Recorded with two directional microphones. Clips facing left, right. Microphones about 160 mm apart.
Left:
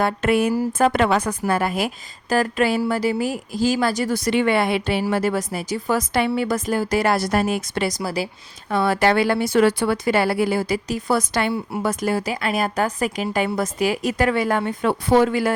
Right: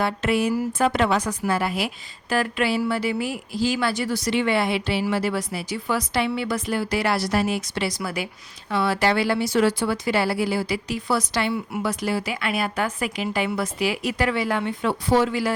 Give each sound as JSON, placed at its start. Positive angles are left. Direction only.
{"t": 0.0, "sound": "speech", "side_deg": 50}
{"t": 2.3, "sound": "a sound", "side_deg": 40}
{"t": 2.9, "sound": "speech", "side_deg": 40}
{"t": 8.7, "sound": "speech", "side_deg": 50}